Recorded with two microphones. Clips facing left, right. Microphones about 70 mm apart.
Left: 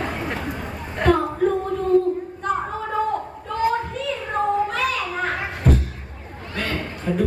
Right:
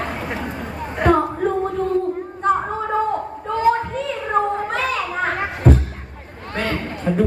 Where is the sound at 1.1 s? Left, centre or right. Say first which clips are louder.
Right 1 dB; right.